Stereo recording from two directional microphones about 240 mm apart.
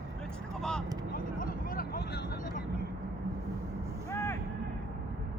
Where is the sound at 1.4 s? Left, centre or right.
Left.